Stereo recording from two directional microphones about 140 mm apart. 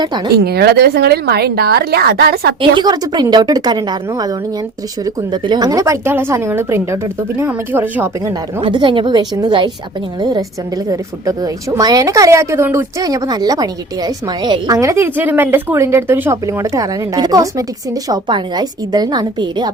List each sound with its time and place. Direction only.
0.3 s a woman's voice: 90° right
2.6 s a woman's voice: 30° right (ahead or behind); by 8.3 s 15° right (ahead or behind)
8.6 s speech: 35° right (ahead or behind)
10.8 s a woman's voice: 25° right (ahead or behind)